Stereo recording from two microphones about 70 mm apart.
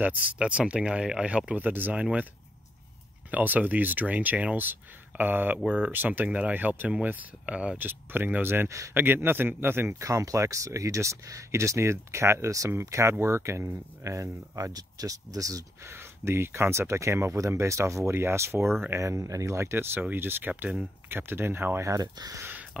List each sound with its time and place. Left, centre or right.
0.0 s speech: right
3.3 s speech: right
7.8 s speech: right
8.6 s speech: right
9.0 s speech: right
10.0 s speech: right
14.7 s speech: right
15.8 s speech: right
22.0 s speech: right